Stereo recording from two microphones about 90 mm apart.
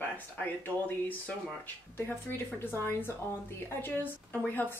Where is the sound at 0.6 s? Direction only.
20° left (ahead or behind).